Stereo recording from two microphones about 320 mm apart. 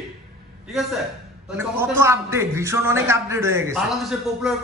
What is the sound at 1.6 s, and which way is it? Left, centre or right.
A man's voice, centre.